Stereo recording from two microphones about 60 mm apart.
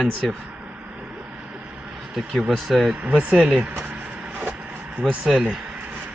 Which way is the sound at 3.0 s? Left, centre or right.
Right.